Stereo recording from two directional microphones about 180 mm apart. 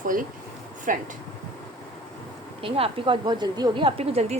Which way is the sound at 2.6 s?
30° right (ahead or behind).